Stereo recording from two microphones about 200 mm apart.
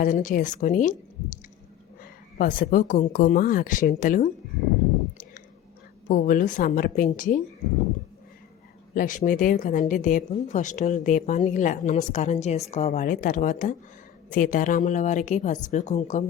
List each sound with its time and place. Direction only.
0.0 s speech: 40° left (ahead or behind)
2.0 s speech: 45° left (ahead or behind)
6.1 s speech: 45° left (ahead or behind)
9.0 s speech: 40° left (ahead or behind)